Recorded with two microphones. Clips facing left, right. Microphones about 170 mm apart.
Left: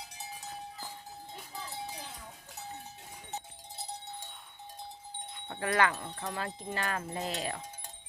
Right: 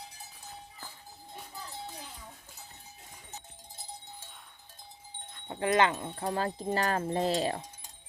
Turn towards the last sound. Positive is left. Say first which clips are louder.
# right 7 dB
turn(degrees=-35)  # may be behind; listen again after turning